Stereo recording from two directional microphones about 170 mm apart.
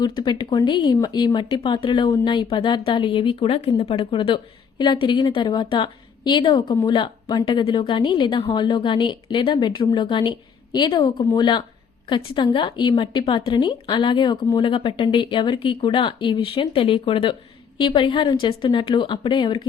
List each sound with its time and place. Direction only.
0.0 s speech: 25° left (ahead or behind)